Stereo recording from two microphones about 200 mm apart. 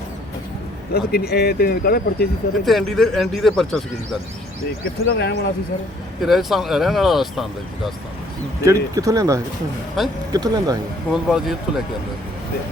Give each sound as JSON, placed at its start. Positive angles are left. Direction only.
{"t": 0.9, "sound": "speech", "side_deg": 50}
{"t": 2.6, "sound": "speech", "side_deg": 0}
{"t": 5.0, "sound": "speech", "side_deg": 55}
{"t": 6.2, "sound": "speech", "side_deg": 0}
{"t": 8.6, "sound": "speech", "side_deg": -15}
{"t": 10.0, "sound": "speech", "side_deg": 0}
{"t": 10.3, "sound": "speech", "side_deg": -20}
{"t": 11.1, "sound": "speech", "side_deg": 0}